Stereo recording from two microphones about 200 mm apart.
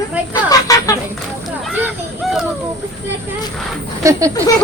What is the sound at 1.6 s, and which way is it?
Speech, 5° right (ahead or behind).